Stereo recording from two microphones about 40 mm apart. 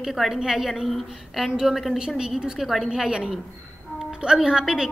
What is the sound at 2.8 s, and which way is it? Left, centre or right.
A woman's voice, centre.